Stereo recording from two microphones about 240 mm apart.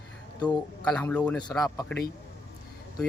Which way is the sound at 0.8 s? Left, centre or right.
Centre.